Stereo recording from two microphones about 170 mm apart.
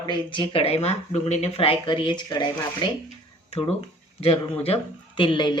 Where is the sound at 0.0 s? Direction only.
25° left (ahead or behind).